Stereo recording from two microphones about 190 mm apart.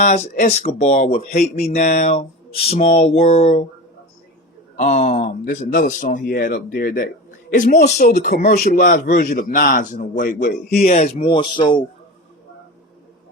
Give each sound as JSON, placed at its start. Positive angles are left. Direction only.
{"t": 0.0, "sound": "speech", "side_deg": 35}
{"t": 1.3, "sound": "a man's voice", "side_deg": 50}
{"t": 1.6, "sound": "speech", "side_deg": 35}
{"t": 4.8, "sound": "a man's voice", "side_deg": 35}
{"t": 7.5, "sound": "a man's voice", "side_deg": 40}